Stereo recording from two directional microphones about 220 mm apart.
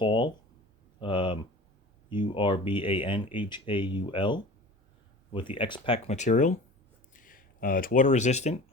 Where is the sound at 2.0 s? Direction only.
20° left (ahead or behind).